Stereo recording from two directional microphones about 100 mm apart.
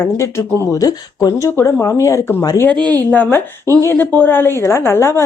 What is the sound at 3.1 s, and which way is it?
Speech, 20° left (ahead or behind).